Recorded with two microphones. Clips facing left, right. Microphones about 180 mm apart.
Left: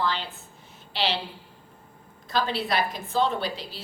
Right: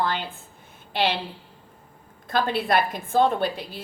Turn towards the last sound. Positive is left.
turn(degrees=-50)  # may be behind; listen again after turning